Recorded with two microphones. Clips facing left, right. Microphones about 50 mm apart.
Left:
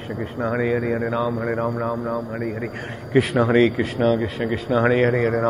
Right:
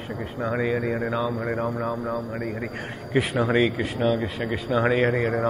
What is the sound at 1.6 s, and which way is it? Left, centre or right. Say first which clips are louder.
Speech: left 3 dB; left.